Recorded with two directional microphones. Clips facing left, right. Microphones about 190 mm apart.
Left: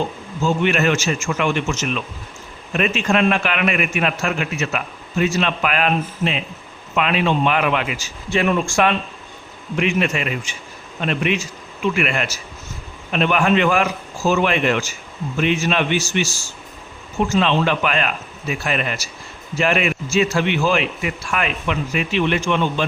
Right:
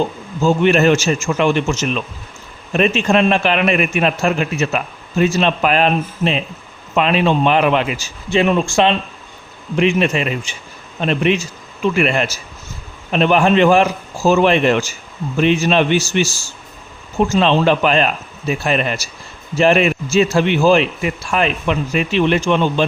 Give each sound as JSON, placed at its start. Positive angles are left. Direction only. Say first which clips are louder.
{"t": 0.4, "sound": "a man's voice", "louder": "right 5 dB", "side_deg": -35}